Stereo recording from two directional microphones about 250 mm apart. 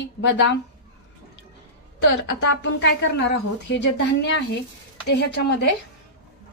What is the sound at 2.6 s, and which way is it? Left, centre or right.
A woman's voice, left.